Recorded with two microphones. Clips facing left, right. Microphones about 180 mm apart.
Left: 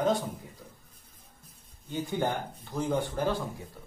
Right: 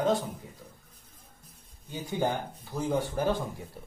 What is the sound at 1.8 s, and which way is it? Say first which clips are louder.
Speech: even; 10° right (ahead or behind).